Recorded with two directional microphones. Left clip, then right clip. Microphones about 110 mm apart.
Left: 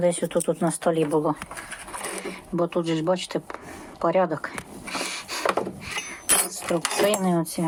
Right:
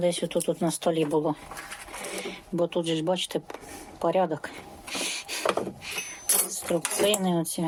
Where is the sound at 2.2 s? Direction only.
25° right (ahead or behind).